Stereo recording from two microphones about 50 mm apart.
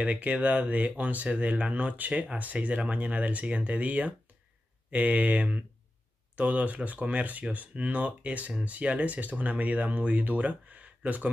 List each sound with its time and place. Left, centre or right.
0.0 s speech: right